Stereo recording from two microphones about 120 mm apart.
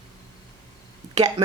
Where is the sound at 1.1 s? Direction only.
35° right (ahead or behind).